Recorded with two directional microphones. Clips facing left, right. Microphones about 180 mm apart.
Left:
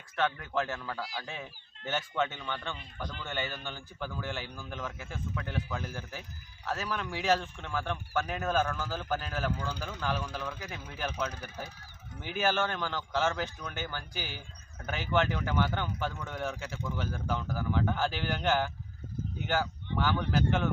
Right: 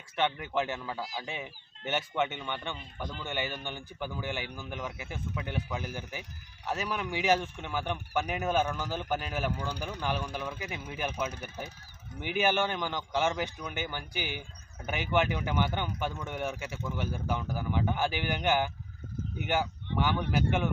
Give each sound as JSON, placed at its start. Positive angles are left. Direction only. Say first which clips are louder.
{"t": 0.2, "sound": "speech", "louder": "right 1 dB", "side_deg": -20}